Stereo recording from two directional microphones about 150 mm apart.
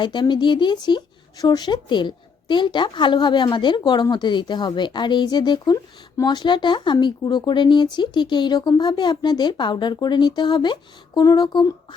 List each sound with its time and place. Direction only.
0.0 s speech: 30° left (ahead or behind)